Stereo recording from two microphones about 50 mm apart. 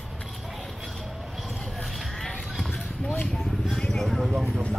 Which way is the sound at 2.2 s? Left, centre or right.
Centre.